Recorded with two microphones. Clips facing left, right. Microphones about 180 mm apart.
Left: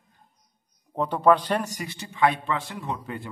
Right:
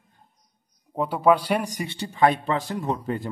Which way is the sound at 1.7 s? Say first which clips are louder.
Right 5 dB; 30° right (ahead or behind).